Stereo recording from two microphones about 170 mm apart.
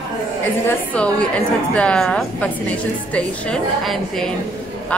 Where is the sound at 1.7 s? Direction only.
5° left (ahead or behind).